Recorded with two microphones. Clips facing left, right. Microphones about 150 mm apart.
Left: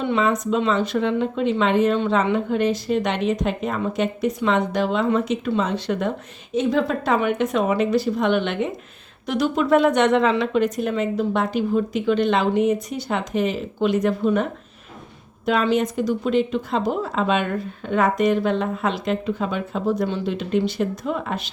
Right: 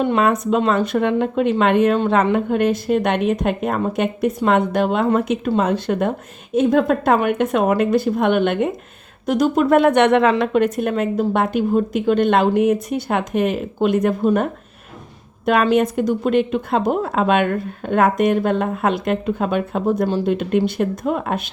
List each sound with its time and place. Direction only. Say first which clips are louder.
0.0 s a woman's voice: right 4 dB; 50° right (ahead or behind)
15.7 s a woman's voice: right 4 dB; 60° right (ahead or behind)